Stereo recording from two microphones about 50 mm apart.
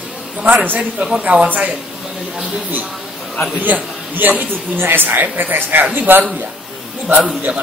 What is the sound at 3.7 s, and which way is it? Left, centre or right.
A woman's voice, right.